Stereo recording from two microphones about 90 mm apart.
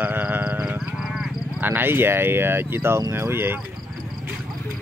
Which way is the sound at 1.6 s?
25° right (ahead or behind).